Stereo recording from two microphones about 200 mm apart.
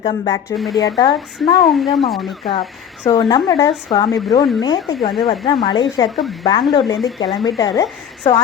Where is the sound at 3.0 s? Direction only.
20° left (ahead or behind).